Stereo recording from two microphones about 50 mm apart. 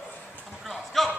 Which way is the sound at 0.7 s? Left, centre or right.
Centre.